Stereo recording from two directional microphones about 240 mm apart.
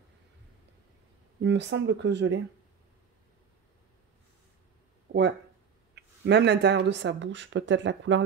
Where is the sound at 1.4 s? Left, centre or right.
Right.